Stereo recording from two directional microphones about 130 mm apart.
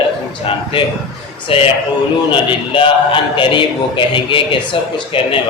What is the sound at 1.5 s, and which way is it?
A man's voice, 45° left (ahead or behind).